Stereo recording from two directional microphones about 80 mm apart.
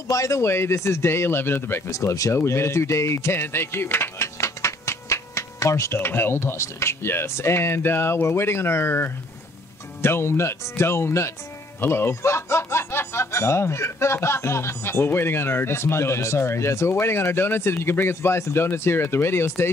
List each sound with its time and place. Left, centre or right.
0.1 s speech: left